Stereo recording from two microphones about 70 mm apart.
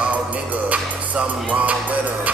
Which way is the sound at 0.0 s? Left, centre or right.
Centre.